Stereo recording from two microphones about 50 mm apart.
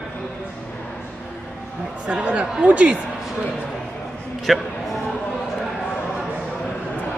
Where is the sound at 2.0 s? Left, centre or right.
Right.